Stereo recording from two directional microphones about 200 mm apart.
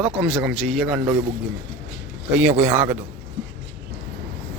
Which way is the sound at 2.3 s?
5° right (ahead or behind).